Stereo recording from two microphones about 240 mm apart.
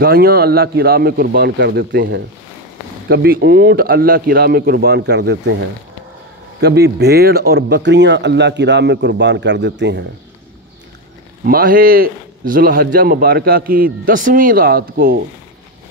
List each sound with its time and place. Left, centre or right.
0.0 s a man's voice: right
11.4 s a man's voice: right